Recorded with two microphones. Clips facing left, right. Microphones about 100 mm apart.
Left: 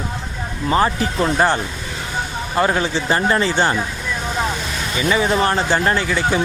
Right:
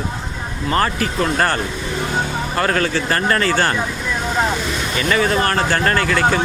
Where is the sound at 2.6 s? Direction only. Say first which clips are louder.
Left 1 dB; 15° left (ahead or behind).